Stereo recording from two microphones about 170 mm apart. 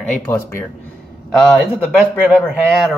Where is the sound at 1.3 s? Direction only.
5° left (ahead or behind).